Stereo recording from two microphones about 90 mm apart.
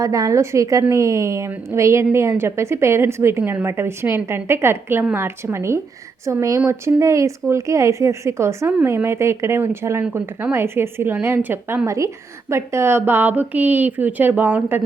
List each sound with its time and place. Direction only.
0.0 s a woman's voice: 40° right (ahead or behind)
11.9 s a woman's voice: 35° right (ahead or behind); by 14.8 s 20° right (ahead or behind)